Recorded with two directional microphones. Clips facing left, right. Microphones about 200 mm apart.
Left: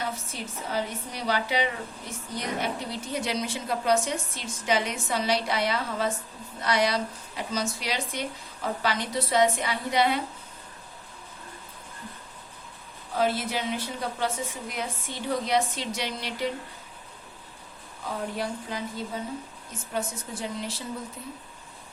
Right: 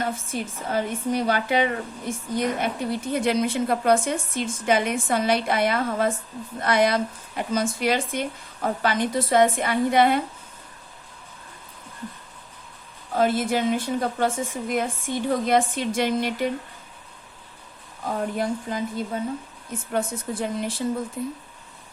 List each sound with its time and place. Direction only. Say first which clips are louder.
0.0 s a woman's voice: right 6 dB; 50° right (ahead or behind)
13.1 s a woman's voice: right 5 dB; 50° right (ahead or behind)
18.1 s a woman's voice: right 6 dB; 50° right (ahead or behind)
19.9 s a woman's voice: right 5 dB; 55° right (ahead or behind)